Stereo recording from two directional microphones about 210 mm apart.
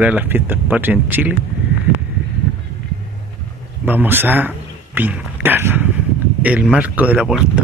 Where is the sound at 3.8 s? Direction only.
10° right (ahead or behind).